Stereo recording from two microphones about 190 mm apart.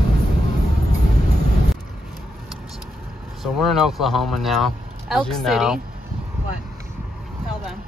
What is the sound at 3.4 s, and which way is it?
Speech, centre (ahead or behind).